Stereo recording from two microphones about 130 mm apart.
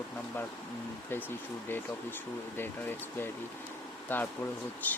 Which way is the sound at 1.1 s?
15° left (ahead or behind).